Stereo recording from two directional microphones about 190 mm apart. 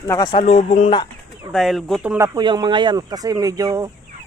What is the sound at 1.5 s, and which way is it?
Speech, centre (ahead or behind).